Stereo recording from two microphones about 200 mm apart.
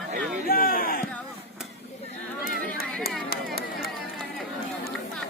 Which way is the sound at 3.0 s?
50° left (ahead or behind).